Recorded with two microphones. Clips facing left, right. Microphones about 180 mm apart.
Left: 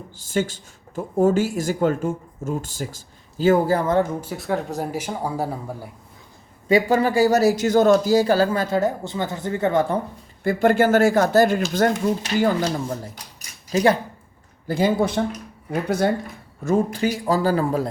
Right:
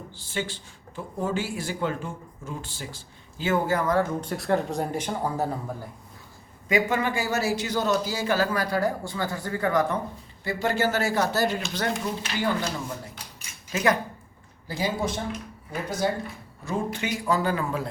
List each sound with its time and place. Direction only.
0.2 s speech: 45° left (ahead or behind); by 4.0 s 30° left (ahead or behind)
4.2 s speech: 5° left (ahead or behind)
6.7 s a man's voice: 35° left (ahead or behind)
10.4 s a man's voice: 50° left (ahead or behind)
13.4 s a sound: 35° left (ahead or behind)
14.7 s speech: 55° left (ahead or behind)
16.6 s a man's voice: 35° left (ahead or behind)